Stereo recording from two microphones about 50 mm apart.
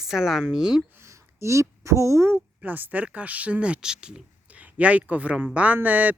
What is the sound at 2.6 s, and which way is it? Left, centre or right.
Speech, right.